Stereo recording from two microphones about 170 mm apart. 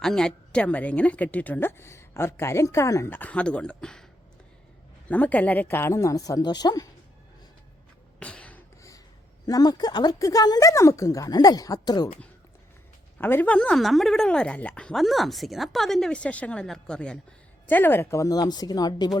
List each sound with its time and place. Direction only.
0.0 s a woman's voice: 5° left (ahead or behind)
5.0 s a woman's voice: 10° left (ahead or behind)
8.2 s a sound: 5° left (ahead or behind)
9.5 s speech: 20° left (ahead or behind)
13.1 s speech: 10° left (ahead or behind)